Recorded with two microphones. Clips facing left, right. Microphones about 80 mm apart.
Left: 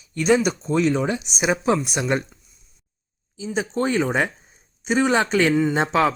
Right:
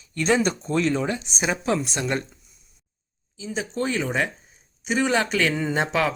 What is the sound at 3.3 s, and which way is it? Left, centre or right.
Speech, left.